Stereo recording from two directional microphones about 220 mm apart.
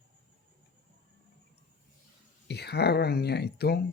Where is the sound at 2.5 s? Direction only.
50° left (ahead or behind).